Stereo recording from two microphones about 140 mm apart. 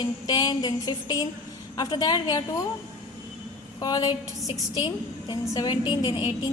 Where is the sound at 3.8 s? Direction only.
25° left (ahead or behind).